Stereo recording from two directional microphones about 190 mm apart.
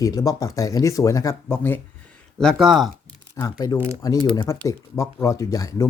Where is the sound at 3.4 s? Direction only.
20° left (ahead or behind).